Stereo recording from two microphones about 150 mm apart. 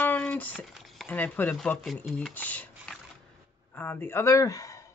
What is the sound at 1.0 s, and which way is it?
A man's voice, 10° left (ahead or behind).